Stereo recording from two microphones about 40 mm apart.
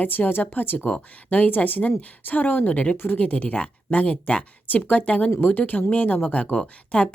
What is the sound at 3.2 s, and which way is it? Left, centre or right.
Speech, left.